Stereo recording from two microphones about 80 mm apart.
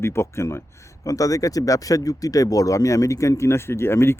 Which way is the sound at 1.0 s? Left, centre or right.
Left.